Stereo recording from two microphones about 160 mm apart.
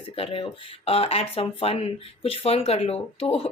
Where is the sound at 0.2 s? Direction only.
35° left (ahead or behind).